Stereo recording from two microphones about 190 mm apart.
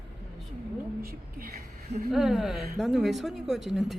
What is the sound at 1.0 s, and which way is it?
Speech, 50° right (ahead or behind).